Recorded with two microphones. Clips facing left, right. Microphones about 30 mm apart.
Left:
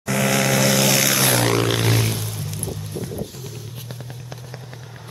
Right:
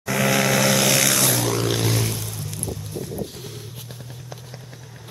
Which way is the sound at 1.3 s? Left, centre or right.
Left.